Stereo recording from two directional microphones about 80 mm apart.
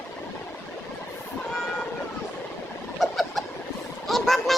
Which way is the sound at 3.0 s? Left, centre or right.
Centre.